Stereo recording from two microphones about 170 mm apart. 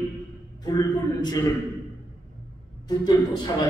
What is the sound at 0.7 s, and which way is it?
Speech, 20° left (ahead or behind).